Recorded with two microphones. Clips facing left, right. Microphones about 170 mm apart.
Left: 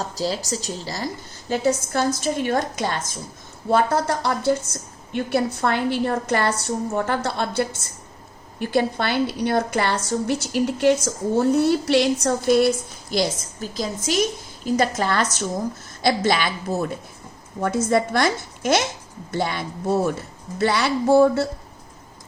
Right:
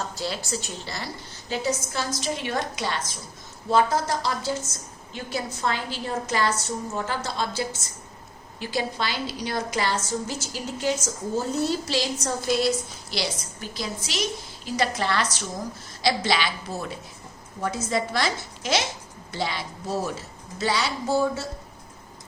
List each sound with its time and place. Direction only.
0.2 s a woman's voice: 35° left (ahead or behind); by 21.4 s 60° left (ahead or behind)